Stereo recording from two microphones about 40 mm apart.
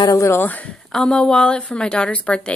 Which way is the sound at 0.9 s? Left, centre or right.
Centre.